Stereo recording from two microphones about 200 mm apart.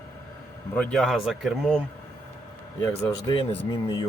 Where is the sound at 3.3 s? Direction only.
25° left (ahead or behind).